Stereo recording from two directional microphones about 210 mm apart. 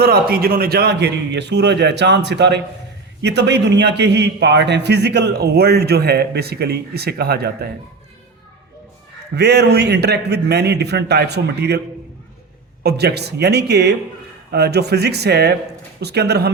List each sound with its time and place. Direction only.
0.0 s a man's voice: 45° right (ahead or behind)
9.3 s a man's voice: 50° right (ahead or behind)
12.8 s a man's voice: 50° right (ahead or behind)